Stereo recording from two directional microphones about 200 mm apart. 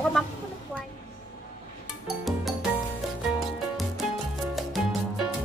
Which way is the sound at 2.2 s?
Centre (ahead or behind).